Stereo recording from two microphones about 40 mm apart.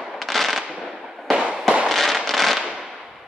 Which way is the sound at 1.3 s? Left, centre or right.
Centre.